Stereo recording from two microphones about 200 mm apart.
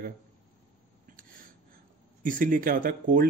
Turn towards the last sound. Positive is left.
turn(degrees=-45)  # may be behind; listen again after turning